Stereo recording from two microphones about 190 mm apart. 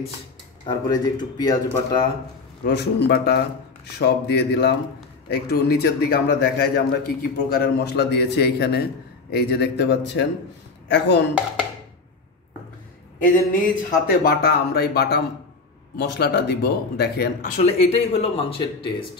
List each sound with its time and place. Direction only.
0.7 s speech: 20° left (ahead or behind)
2.6 s a man's voice: 55° left (ahead or behind)
13.2 s a man's voice: 45° left (ahead or behind)
17.6 s speech: 35° left (ahead or behind)